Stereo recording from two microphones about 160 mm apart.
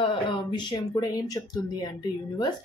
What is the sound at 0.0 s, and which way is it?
Speech, 30° left (ahead or behind).